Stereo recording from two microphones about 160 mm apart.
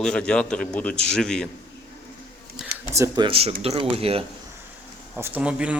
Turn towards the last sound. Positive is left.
turn(degrees=-5)  # may be behind; listen again after turning